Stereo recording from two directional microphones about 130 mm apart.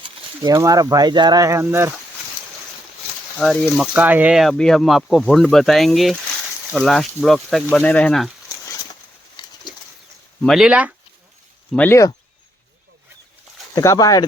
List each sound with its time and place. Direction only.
0.4 s speech: 25° right (ahead or behind)
3.3 s speech: 5° left (ahead or behind)
3.9 s speech: 15° right (ahead or behind); by 8.2 s 10° left (ahead or behind)
9.4 s bird: 35° left (ahead or behind)
10.4 s speech: 5° right (ahead or behind)
11.7 s speech: 10° left (ahead or behind)
13.7 s speech: 30° left (ahead or behind)